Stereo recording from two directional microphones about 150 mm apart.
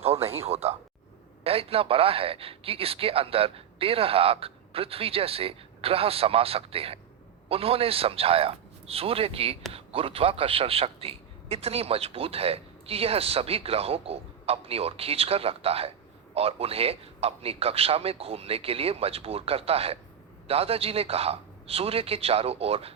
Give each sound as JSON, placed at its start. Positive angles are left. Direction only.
{"t": 0.0, "sound": "a man's voice", "side_deg": -40}